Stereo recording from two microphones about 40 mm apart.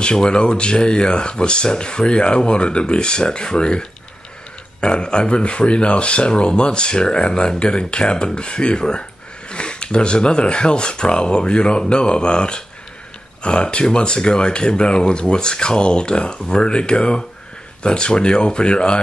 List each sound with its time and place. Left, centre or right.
0.0 s speech: left